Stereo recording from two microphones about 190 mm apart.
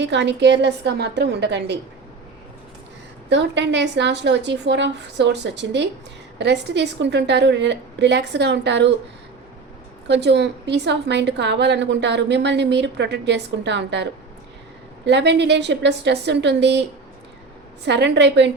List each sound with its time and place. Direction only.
0.0 s a woman's voice: 65° right (ahead or behind)
3.2 s a woman's voice: 70° right (ahead or behind)
10.1 s a woman's voice: 65° right (ahead or behind)
17.8 s a woman's voice: 65° right (ahead or behind)